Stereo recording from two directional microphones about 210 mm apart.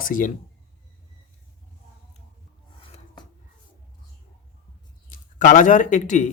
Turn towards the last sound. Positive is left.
turn(degrees=35)  # may be behind; listen again after turning